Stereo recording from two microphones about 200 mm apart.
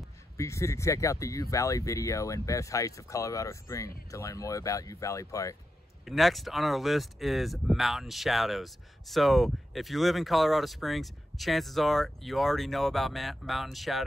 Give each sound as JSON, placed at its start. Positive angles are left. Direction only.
{"t": 0.4, "sound": "speech", "side_deg": 15}
{"t": 6.0, "sound": "speech", "side_deg": 0}